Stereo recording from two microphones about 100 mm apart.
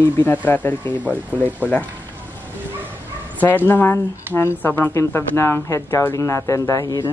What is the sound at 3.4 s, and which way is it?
Speech, 20° left (ahead or behind).